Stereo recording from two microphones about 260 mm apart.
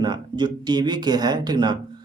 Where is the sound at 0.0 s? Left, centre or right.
Centre.